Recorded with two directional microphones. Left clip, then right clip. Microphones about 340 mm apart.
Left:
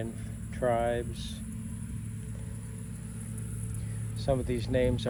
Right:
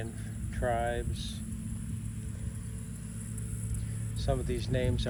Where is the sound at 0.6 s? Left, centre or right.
Centre.